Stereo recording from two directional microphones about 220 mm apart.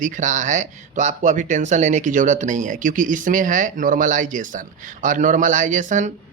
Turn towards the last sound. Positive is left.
turn(degrees=-35)  # may be behind; listen again after turning